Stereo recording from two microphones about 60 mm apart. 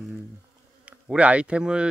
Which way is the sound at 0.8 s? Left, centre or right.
Centre.